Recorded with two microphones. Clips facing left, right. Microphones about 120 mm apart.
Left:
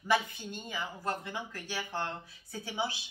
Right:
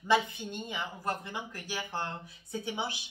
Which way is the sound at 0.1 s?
20° right (ahead or behind).